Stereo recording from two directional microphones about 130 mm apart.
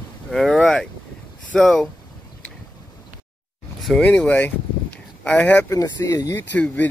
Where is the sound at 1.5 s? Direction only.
5° left (ahead or behind).